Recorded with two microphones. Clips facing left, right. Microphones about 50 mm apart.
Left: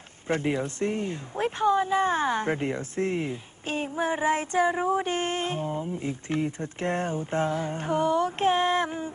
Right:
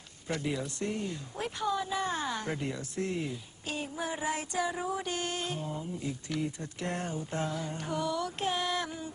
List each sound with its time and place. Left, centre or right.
0.3 s speech: left